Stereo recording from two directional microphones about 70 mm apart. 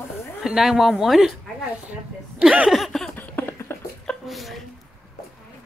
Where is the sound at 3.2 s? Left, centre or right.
Left.